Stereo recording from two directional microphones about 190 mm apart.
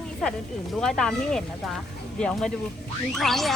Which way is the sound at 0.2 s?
Centre (ahead or behind).